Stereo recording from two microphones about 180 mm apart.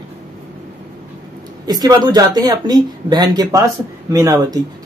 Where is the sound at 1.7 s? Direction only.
20° right (ahead or behind).